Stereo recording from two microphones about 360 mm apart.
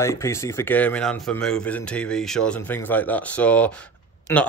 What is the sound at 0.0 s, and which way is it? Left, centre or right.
A man's voice, centre.